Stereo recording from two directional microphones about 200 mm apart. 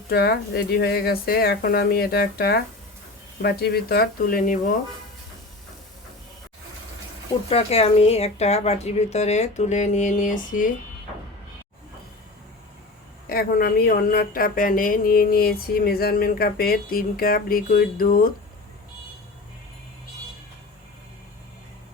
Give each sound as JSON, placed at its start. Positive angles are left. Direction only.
{"t": 0.1, "sound": "speech", "side_deg": 55}
{"t": 7.5, "sound": "speech", "side_deg": 30}
{"t": 13.2, "sound": "speech", "side_deg": 50}